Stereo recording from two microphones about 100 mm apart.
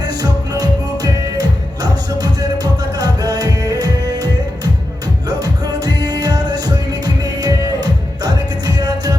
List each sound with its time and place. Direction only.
0.0 s music: 40° right (ahead or behind)